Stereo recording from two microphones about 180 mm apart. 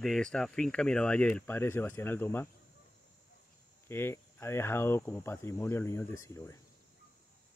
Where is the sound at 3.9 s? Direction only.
15° left (ahead or behind).